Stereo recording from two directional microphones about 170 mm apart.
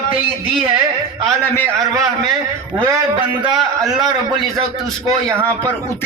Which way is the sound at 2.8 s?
20° right (ahead or behind).